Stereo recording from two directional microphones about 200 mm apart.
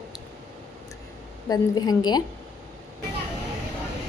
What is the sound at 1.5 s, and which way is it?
Speech, 20° left (ahead or behind).